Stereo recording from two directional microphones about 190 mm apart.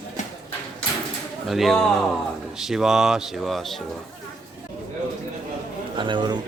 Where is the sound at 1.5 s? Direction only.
Centre (ahead or behind).